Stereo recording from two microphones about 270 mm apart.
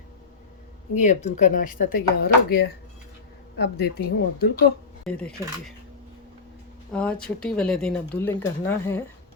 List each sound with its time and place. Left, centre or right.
0.9 s speech: left
5.0 s speech: centre
6.9 s speech: centre